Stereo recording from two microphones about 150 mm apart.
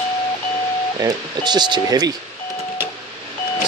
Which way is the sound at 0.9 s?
25° right (ahead or behind).